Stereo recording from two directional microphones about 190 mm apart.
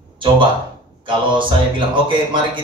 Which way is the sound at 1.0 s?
25° right (ahead or behind).